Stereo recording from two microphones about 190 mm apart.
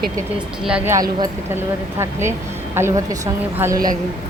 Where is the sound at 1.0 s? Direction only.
20° right (ahead or behind).